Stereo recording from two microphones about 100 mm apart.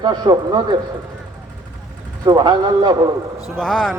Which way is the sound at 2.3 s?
45° right (ahead or behind).